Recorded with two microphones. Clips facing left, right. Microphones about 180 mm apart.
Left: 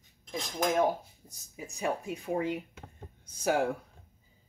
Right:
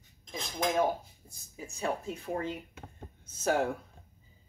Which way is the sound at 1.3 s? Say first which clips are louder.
Left 1 dB; 15° left (ahead or behind).